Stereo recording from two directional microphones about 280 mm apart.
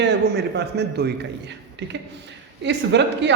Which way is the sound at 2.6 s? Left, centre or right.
Right.